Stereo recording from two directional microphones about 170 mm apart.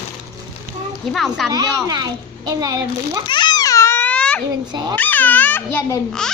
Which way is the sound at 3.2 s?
25° left (ahead or behind).